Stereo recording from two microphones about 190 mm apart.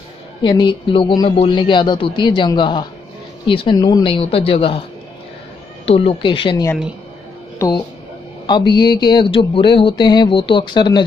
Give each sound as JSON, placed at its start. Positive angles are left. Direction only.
{"t": 0.4, "sound": "speech", "side_deg": 25}
{"t": 5.9, "sound": "speech", "side_deg": 30}